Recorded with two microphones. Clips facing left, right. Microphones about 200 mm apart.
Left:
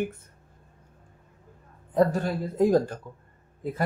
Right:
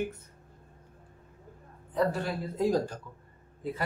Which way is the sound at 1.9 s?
50° left (ahead or behind).